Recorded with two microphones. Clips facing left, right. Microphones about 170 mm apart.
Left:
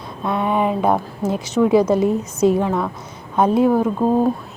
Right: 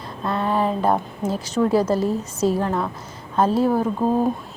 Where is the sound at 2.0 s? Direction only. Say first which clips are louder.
Left 5 dB; 55° left (ahead or behind).